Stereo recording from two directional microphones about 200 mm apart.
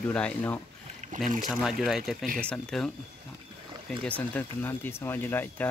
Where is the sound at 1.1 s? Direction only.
40° right (ahead or behind).